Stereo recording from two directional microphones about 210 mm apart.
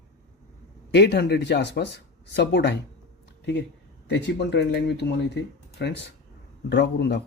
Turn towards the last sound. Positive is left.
turn(degrees=55)  # may be behind; listen again after turning